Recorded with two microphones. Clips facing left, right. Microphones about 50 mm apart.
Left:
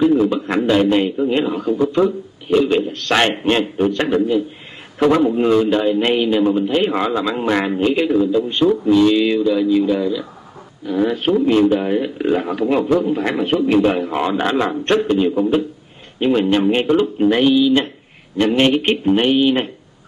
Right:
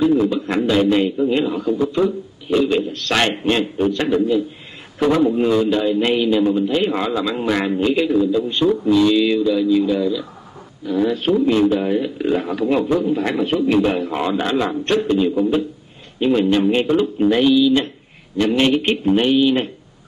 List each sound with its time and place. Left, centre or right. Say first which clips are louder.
0.0 s a man's voice: left 1 dB; left